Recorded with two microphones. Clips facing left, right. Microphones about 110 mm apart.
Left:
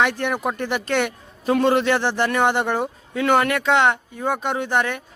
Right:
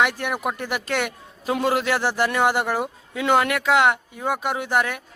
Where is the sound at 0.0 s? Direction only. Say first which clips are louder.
Left 2 dB; 5° right (ahead or behind).